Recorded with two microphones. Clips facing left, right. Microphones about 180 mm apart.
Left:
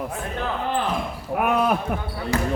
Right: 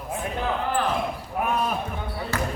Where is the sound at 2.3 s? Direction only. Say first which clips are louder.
Left 4 dB; 15° left (ahead or behind).